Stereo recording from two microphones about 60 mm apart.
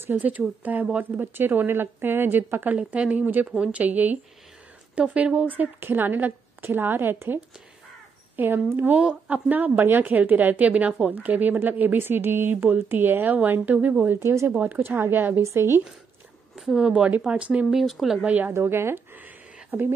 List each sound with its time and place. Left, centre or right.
0.1 s a woman's voice: right
1.2 s a woman's voice: right
8.4 s a woman's voice: right
15.4 s speech: right
16.5 s a sound: centre
16.8 s a woman's voice: centre
17.6 s speech: centre
18.2 s a woman's voice: right
18.5 s speech: right
19.2 s a sound: right